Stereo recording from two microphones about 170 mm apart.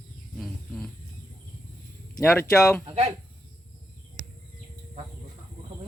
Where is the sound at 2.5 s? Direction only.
5° left (ahead or behind).